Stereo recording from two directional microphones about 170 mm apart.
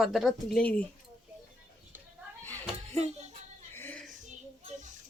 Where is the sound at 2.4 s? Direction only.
10° left (ahead or behind).